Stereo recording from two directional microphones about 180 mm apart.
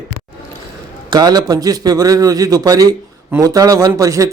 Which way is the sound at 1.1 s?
20° right (ahead or behind).